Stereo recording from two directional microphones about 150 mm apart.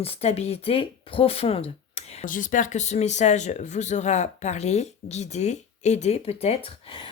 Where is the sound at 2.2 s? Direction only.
60° left (ahead or behind).